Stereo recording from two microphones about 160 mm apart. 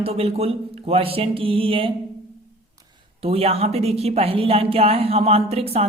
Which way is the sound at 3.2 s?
40° right (ahead or behind).